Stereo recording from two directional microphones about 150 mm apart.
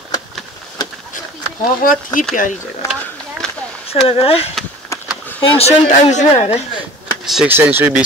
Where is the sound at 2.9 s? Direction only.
5° left (ahead or behind).